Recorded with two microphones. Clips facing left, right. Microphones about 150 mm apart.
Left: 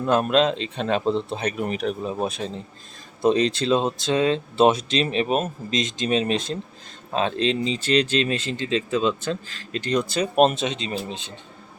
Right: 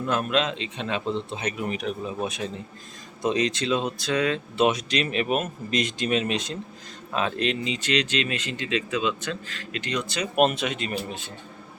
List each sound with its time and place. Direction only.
0.0 s speech: 40° left (ahead or behind); by 11.3 s 20° left (ahead or behind)